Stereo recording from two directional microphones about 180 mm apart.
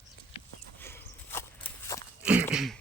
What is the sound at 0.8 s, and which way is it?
Horse, 15° left (ahead or behind).